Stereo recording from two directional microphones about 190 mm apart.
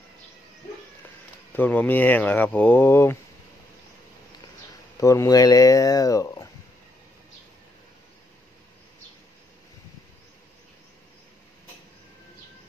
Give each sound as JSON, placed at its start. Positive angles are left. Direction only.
{"t": 1.5, "sound": "speech", "side_deg": 10}
{"t": 5.0, "sound": "speech", "side_deg": 15}